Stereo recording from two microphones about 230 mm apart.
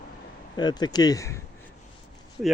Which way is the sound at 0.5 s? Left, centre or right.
Centre.